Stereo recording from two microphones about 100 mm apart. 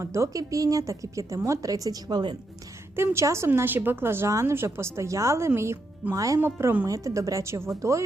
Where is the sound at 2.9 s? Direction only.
25° right (ahead or behind).